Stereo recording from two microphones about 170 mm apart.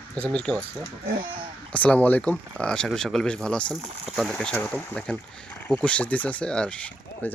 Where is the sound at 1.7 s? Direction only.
10° left (ahead or behind).